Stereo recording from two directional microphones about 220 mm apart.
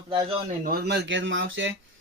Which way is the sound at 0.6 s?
45° right (ahead or behind).